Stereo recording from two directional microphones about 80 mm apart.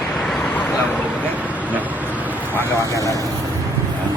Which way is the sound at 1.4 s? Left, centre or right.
Centre.